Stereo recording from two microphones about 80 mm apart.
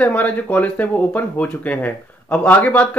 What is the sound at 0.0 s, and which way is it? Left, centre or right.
Speech, centre.